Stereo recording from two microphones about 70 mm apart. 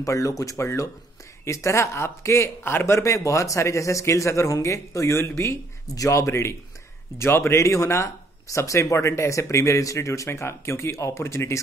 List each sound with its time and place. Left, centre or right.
0.0 s speech: left